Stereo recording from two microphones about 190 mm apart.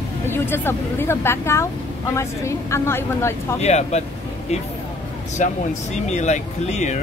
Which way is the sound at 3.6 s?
35° left (ahead or behind).